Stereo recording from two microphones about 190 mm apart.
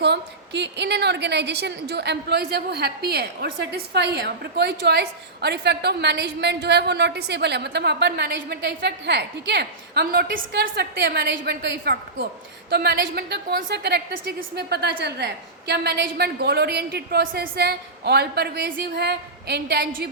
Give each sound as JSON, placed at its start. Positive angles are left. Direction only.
{"t": 0.0, "sound": "a woman's voice", "side_deg": -65}